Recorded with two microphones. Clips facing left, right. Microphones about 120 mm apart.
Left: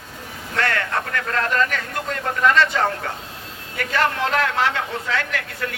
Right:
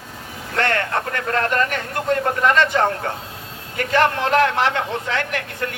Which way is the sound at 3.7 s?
40° right (ahead or behind).